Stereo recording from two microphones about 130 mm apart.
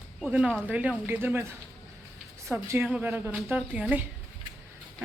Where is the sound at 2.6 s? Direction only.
15° right (ahead or behind).